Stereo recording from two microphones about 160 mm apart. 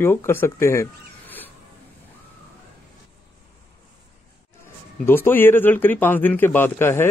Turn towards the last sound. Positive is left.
turn(degrees=15)  # may be behind; listen again after turning